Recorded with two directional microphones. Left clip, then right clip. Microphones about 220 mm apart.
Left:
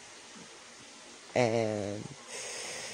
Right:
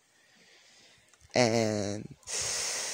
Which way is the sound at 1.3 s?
45° right (ahead or behind).